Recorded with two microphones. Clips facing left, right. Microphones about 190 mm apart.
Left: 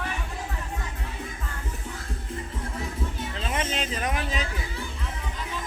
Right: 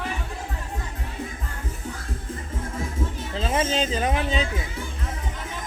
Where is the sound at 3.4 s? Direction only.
30° right (ahead or behind).